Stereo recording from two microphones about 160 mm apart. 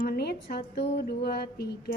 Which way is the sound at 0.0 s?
80° left.